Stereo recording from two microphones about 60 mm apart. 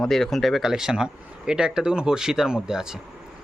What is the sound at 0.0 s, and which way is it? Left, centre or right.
Speech, centre.